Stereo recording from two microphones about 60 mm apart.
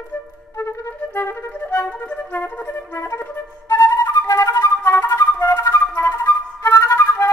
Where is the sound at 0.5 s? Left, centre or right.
Left.